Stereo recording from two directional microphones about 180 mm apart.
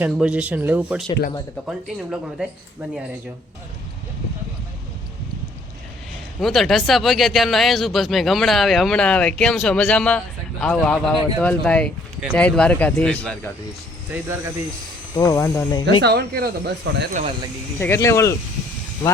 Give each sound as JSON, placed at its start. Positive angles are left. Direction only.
{"t": 0.0, "sound": "speech", "side_deg": -5}
{"t": 6.4, "sound": "speech", "side_deg": 0}
{"t": 14.1, "sound": "speech", "side_deg": -15}
{"t": 15.1, "sound": "speech", "side_deg": 20}
{"t": 16.0, "sound": "speech", "side_deg": -60}
{"t": 17.7, "sound": "speech", "side_deg": 15}